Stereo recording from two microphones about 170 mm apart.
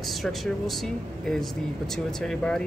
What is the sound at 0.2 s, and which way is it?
Speech, centre (ahead or behind).